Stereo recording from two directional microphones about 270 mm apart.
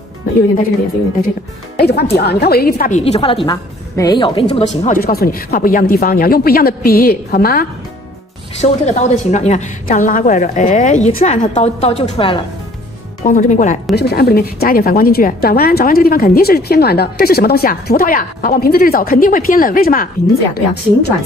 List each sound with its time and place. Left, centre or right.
1.8 s a woman's voice: left